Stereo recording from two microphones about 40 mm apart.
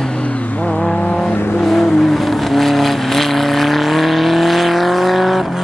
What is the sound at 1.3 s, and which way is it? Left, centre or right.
Vehicle, left.